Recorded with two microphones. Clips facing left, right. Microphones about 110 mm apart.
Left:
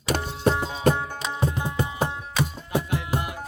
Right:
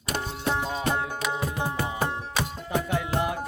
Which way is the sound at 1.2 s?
25° left (ahead or behind).